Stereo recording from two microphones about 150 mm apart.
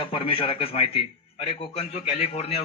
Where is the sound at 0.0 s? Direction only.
35° left (ahead or behind).